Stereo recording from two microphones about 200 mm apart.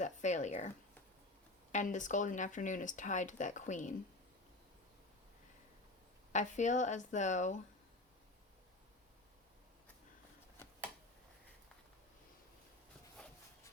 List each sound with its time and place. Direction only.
0.0 s speech: 35° left (ahead or behind)
1.7 s speech: 40° left (ahead or behind)
6.3 s speech: 40° left (ahead or behind)